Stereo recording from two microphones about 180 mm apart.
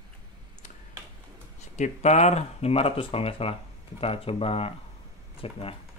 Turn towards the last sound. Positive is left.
turn(degrees=30)  # may be behind; listen again after turning